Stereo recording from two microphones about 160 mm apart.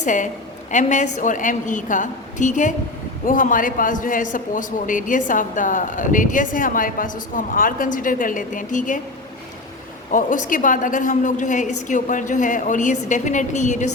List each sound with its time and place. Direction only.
0.0 s a woman's voice: 50° left (ahead or behind)
10.1 s a woman's voice: 55° left (ahead or behind)